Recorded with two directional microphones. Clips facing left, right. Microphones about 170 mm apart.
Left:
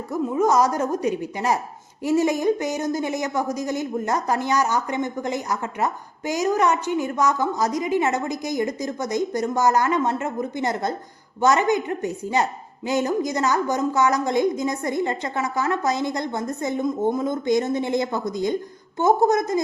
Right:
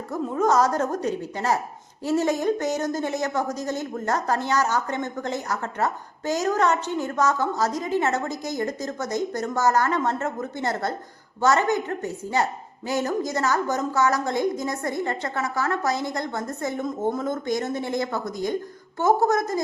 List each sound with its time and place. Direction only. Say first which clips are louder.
0.1 s a woman's voice: left 2 dB; 10° left (ahead or behind)